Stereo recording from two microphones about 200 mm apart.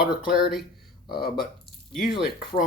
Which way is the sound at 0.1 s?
45° left (ahead or behind).